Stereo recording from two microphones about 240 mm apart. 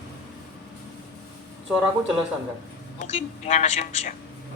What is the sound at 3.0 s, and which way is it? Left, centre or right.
A man's voice, left.